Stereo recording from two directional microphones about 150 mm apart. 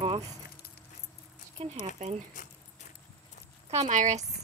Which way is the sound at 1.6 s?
40° right (ahead or behind).